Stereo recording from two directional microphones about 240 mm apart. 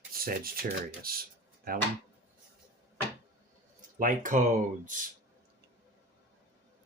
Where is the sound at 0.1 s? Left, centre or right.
Right.